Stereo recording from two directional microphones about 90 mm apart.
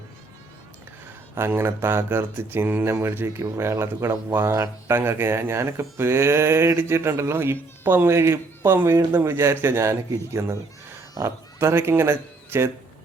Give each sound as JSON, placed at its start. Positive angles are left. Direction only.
{"t": 1.4, "sound": "speech", "side_deg": -25}